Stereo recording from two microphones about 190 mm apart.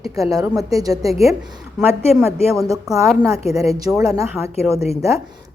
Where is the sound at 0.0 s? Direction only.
15° right (ahead or behind).